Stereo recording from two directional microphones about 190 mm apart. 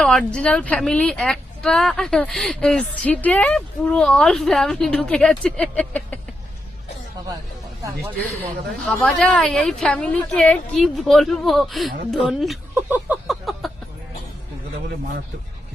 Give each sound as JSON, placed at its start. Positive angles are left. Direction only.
{"t": 0.0, "sound": "a woman's voice", "side_deg": 5}
{"t": 8.8, "sound": "a woman's voice", "side_deg": 0}
{"t": 12.7, "sound": "a sound", "side_deg": -10}